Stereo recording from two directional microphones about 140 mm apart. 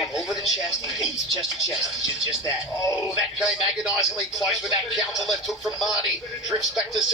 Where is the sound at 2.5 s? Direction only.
25° left (ahead or behind).